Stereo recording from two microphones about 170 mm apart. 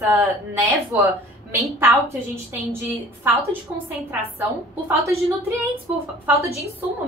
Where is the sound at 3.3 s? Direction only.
15° right (ahead or behind).